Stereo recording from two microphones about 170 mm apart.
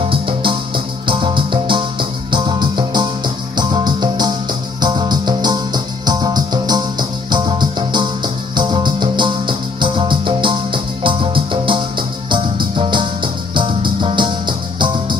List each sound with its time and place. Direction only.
0.1 s music: 30° right (ahead or behind)